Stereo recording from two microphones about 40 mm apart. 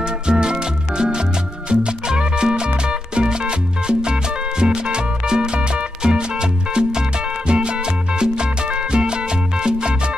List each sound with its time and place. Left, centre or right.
0.0 s music: right